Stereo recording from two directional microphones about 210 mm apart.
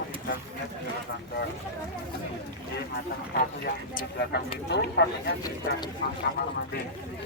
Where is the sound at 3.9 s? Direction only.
50° left (ahead or behind).